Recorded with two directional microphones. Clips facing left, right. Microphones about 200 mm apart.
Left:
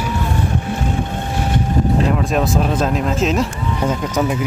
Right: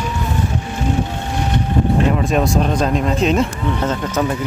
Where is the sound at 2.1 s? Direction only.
Centre (ahead or behind).